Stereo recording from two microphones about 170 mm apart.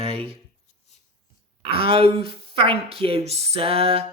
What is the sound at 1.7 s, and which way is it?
Speech, 30° right (ahead or behind).